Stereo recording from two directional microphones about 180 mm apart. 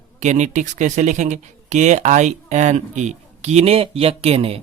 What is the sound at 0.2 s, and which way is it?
Speech, 40° right (ahead or behind).